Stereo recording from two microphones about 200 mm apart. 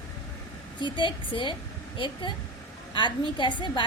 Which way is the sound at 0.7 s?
25° left (ahead or behind).